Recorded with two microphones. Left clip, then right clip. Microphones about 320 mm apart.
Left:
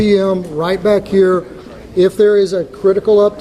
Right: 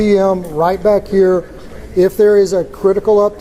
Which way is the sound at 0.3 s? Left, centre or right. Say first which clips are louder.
Right 2 dB; centre.